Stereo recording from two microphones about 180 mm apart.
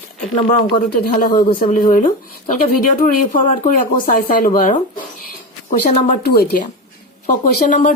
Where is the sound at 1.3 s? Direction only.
25° left (ahead or behind).